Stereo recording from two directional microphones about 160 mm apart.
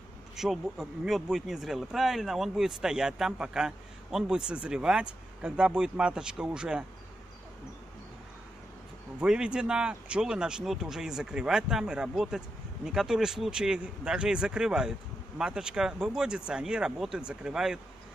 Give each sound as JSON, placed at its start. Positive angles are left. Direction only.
{"t": 0.4, "sound": "speech", "side_deg": 0}
{"t": 9.2, "sound": "speech", "side_deg": -5}